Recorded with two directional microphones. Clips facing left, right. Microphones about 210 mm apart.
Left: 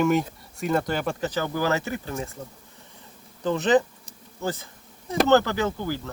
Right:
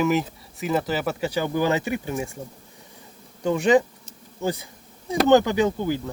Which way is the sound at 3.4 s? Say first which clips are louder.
Right 2 dB; 10° right (ahead or behind).